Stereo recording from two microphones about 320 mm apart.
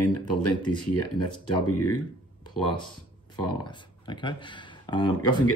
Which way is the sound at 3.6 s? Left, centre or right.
Centre.